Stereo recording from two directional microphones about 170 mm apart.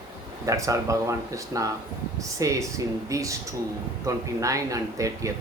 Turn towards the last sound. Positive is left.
turn(degrees=-20)  # may be behind; listen again after turning